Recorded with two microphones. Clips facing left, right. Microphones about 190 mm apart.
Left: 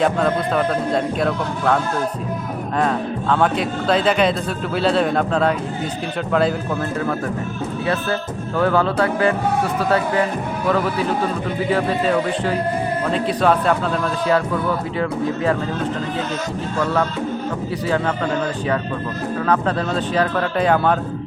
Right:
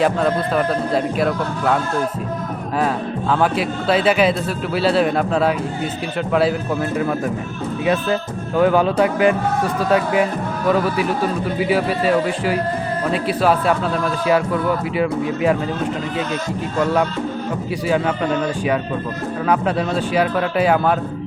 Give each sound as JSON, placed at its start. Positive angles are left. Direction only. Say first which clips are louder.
{"t": 0.0, "sound": "speech", "louder": "right 1 dB", "side_deg": -5}
{"t": 7.9, "sound": "speech", "louder": "right 4 dB", "side_deg": -15}
{"t": 11.7, "sound": "speech", "louder": "right 1 dB", "side_deg": -10}
{"t": 17.8, "sound": "speech", "louder": "right 2 dB", "side_deg": -10}
{"t": 19.5, "sound": "speech", "louder": "right 2 dB", "side_deg": -10}